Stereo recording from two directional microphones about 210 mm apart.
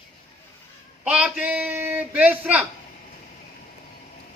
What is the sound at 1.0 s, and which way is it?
A man's voice, 5° right (ahead or behind).